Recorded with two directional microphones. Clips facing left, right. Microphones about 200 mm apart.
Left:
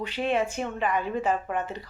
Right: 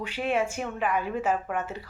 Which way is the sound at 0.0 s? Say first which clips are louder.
Left 1 dB; 10° right (ahead or behind).